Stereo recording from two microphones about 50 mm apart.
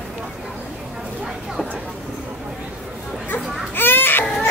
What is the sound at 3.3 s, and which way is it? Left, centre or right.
Baby cry, left.